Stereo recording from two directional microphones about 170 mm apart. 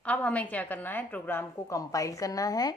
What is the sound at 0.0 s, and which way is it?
A woman's voice, 10° left (ahead or behind).